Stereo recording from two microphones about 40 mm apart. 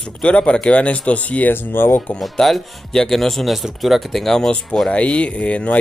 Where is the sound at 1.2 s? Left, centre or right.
Left.